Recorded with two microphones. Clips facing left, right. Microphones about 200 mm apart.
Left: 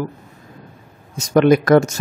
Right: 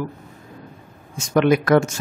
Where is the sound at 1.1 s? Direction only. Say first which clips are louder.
Left 4 dB; 40° left (ahead or behind).